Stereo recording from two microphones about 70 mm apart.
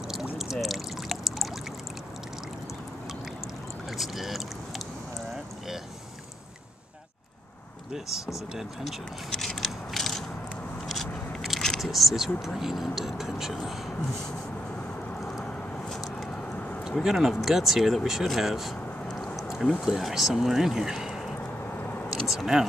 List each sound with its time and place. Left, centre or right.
0.1 s pour: centre
3.9 s speech: centre
9.3 s scissors: centre
10.9 s biting: centre
11.8 s speech: centre
15.9 s a sound: centre
16.3 s a sound: centre
17.0 s speech: centre
19.0 s a sound: centre
19.8 s speech: centre
21.4 s vehicle: left
22.1 s speech: centre